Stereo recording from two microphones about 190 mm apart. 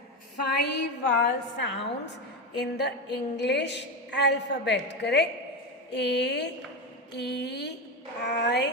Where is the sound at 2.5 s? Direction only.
65° left (ahead or behind).